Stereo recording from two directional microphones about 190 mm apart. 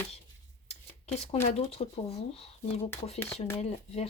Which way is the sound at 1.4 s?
35° left (ahead or behind).